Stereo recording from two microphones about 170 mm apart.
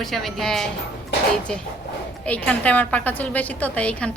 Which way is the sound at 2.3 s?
10° left (ahead or behind).